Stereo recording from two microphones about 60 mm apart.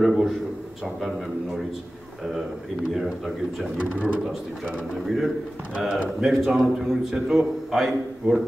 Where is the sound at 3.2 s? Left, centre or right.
Centre.